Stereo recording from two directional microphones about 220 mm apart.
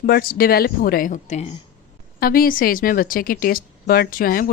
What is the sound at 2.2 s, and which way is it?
A woman's voice, 40° left (ahead or behind).